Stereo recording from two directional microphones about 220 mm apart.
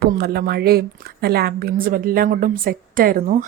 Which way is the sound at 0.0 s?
45° right (ahead or behind).